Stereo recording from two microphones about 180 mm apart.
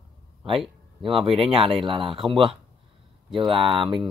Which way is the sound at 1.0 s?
30° right (ahead or behind).